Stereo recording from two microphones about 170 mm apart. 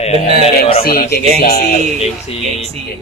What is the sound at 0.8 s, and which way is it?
Speech, 60° left (ahead or behind).